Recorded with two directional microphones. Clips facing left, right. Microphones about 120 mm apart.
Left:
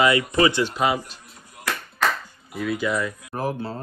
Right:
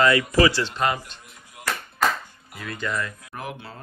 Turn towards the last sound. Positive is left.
turn(degrees=35)  # may be behind; listen again after turning